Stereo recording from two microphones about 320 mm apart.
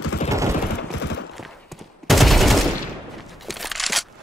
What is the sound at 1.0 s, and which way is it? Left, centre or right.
Clip-clop, left.